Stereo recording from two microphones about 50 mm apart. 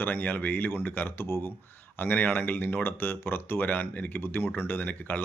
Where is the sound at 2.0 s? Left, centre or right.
Left.